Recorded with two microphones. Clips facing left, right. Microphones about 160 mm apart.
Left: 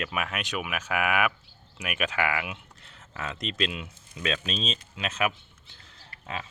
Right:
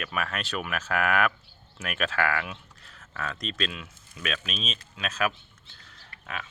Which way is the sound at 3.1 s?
20° left (ahead or behind).